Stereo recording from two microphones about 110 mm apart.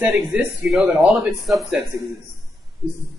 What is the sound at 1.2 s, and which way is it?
Speech, centre (ahead or behind).